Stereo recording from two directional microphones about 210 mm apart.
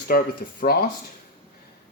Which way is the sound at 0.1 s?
45° left (ahead or behind).